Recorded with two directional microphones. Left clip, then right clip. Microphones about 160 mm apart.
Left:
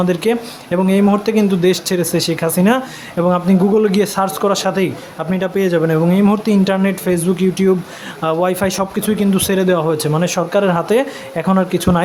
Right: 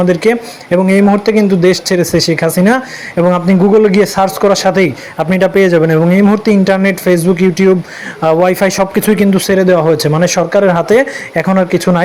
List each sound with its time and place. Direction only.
0.0 s speech: 15° right (ahead or behind)
9.5 s speech: 15° right (ahead or behind)